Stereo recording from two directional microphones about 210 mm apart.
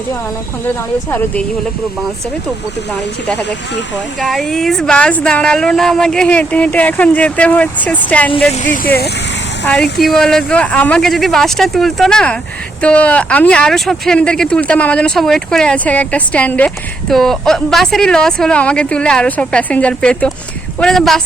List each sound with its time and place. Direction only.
4.2 s speech: centre (ahead or behind)
8.6 s speech: 40° left (ahead or behind)
9.6 s speech: 5° left (ahead or behind)